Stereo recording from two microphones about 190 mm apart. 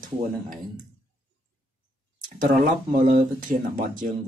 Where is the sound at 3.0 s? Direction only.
45° right (ahead or behind).